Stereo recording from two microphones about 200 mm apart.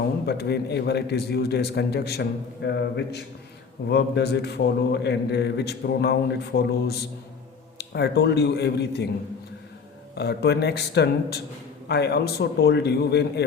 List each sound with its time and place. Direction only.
0.3 s a man's voice: 55° left (ahead or behind)
10.2 s a man's voice: 55° left (ahead or behind)